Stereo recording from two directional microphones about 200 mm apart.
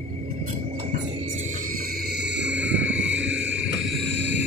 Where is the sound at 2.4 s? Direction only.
60° right (ahead or behind).